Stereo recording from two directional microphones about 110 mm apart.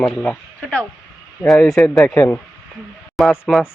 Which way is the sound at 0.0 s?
10° left (ahead or behind).